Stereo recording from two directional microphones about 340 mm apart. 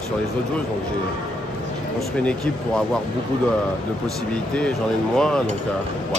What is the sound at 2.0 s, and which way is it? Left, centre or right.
Speech, centre.